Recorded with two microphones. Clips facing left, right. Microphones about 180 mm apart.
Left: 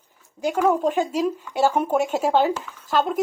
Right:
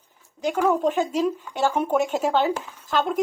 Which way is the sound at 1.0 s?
10° left (ahead or behind).